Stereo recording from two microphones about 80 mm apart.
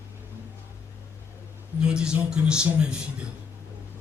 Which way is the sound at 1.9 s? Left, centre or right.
Centre.